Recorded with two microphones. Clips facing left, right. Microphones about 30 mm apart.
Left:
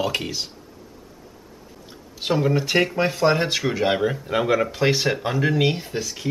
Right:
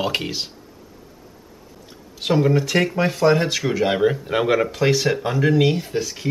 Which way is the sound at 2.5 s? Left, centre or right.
Centre.